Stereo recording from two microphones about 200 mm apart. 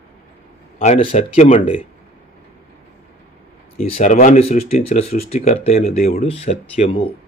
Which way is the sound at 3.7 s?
35° left (ahead or behind).